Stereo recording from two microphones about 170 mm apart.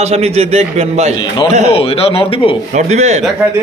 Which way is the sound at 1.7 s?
35° left (ahead or behind).